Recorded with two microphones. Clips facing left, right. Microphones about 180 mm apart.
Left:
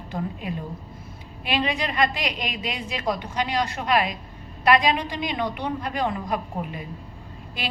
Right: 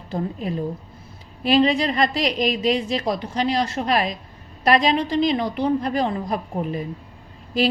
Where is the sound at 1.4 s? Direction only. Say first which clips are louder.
Right 8 dB; 35° right (ahead or behind).